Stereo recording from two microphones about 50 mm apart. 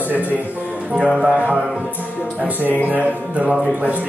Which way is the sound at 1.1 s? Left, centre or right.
Right.